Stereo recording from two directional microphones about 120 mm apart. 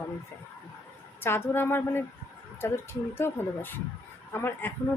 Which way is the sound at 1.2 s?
20° left (ahead or behind).